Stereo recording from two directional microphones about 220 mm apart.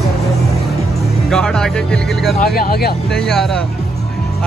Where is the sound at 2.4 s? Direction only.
45° left (ahead or behind).